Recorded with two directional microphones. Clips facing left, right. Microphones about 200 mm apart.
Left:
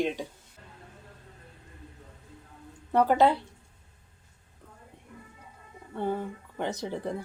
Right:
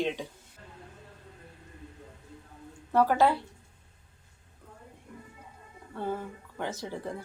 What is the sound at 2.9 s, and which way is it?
Speech, 20° left (ahead or behind).